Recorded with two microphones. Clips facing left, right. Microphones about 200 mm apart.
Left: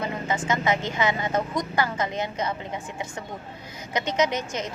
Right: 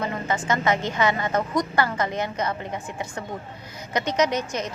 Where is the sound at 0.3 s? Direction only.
20° left (ahead or behind).